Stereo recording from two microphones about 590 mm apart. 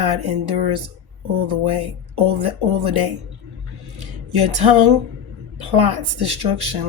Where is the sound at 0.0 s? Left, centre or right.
Right.